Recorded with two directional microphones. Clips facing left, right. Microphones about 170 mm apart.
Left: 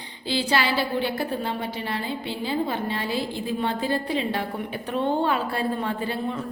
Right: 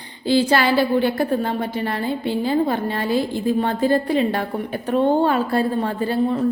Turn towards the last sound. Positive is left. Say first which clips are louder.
# right 7 dB
turn(degrees=-40)  # may be behind; listen again after turning